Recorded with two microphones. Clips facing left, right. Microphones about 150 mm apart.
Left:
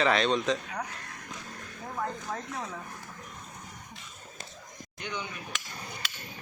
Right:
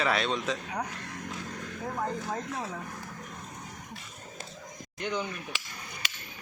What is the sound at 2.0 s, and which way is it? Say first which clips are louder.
Speech: right 1 dB; 10° right (ahead or behind).